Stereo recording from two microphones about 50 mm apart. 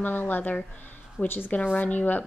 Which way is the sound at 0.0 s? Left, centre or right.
Left.